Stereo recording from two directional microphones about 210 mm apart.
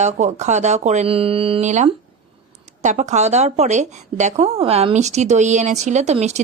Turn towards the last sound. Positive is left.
turn(degrees=-30)  # may be behind; listen again after turning